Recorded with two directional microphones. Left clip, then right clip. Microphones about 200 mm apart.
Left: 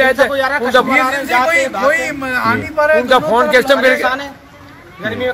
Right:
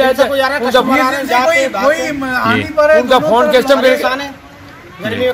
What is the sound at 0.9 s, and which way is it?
Speech, 10° right (ahead or behind).